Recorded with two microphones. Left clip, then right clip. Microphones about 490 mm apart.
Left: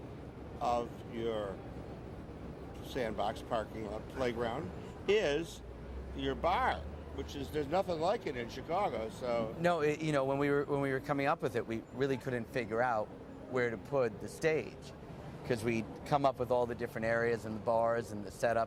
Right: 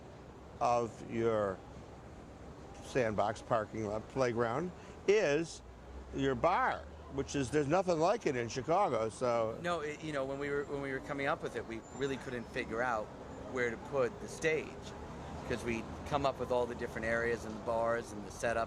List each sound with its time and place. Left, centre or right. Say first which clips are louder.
0.6 s speech: right 2 dB; right
2.9 s speech: right 3 dB; right
9.6 s a man's voice: left 6 dB; left